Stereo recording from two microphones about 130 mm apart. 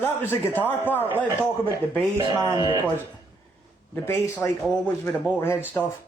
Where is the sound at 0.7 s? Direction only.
15° left (ahead or behind).